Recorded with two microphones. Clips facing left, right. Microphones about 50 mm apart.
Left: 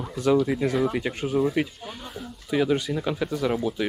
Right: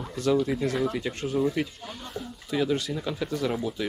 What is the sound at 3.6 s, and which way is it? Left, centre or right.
Speech, centre.